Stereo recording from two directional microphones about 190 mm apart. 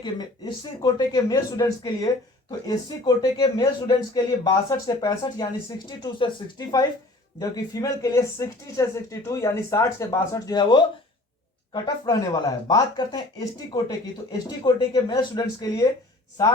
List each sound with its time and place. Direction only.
0.0 s speech: 25° left (ahead or behind)
3.2 s speech: 25° left (ahead or behind)